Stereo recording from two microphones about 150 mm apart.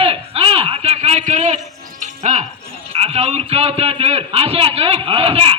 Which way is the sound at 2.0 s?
50° right (ahead or behind).